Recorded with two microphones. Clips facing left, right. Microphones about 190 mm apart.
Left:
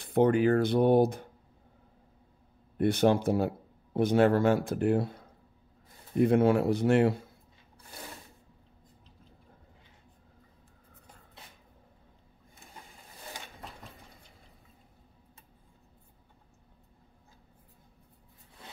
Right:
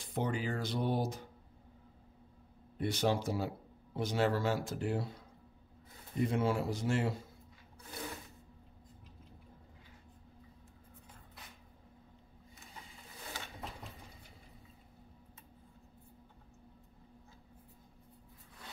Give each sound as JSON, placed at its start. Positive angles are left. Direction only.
{"t": 0.0, "sound": "speech", "side_deg": 60}
{"t": 2.8, "sound": "speech", "side_deg": 55}